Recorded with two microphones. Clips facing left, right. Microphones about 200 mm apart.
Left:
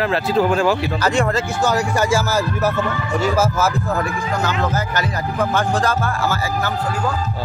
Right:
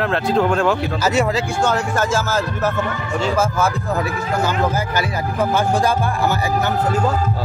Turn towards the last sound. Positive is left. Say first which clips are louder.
# right 2 dB
turn(degrees=-15)  # may be behind; listen again after turning